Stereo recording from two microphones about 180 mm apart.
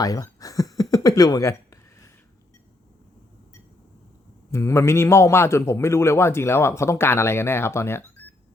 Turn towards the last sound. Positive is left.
turn(degrees=15)  # may be behind; listen again after turning